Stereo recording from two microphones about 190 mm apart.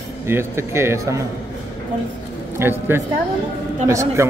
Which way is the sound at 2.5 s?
10° right (ahead or behind).